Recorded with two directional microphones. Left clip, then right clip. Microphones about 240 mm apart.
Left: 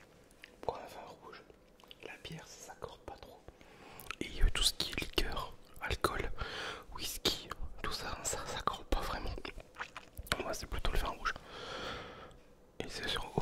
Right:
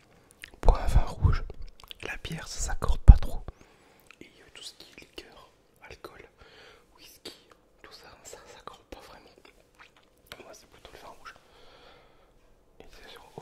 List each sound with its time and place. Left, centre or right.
0.4 s whispering: right
4.1 s whispering: left